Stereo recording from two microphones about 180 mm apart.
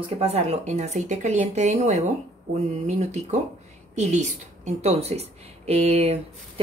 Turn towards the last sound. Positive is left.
turn(degrees=-35)  # may be behind; listen again after turning